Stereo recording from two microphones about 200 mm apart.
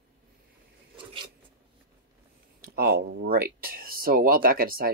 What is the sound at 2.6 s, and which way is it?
Speech, 50° right (ahead or behind).